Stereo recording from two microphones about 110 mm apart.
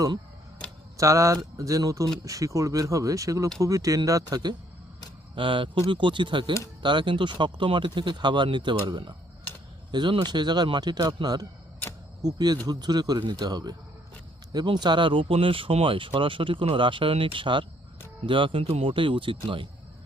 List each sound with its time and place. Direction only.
0.9 s speech: 30° right (ahead or behind)
5.3 s speech: 50° right (ahead or behind)